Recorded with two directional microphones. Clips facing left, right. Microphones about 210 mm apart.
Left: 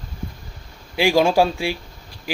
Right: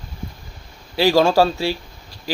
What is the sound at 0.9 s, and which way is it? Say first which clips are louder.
Speech: right 1 dB; 15° left (ahead or behind).